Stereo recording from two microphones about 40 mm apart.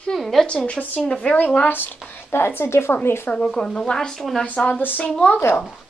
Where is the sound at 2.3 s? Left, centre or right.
Left.